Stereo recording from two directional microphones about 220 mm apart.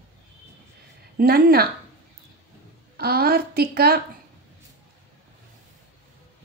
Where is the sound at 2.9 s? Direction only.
45° right (ahead or behind).